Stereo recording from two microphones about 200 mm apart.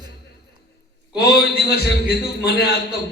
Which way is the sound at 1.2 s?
55° left (ahead or behind).